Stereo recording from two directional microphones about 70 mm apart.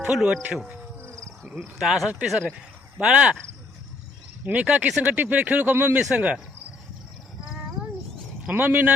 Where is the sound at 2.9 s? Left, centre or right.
Centre.